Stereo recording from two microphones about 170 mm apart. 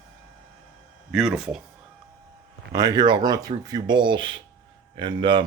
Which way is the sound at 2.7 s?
20° right (ahead or behind).